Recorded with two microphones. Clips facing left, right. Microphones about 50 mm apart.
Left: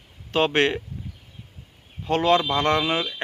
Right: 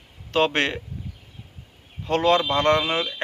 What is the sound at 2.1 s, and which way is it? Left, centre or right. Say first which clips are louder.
A man's voice: even; centre.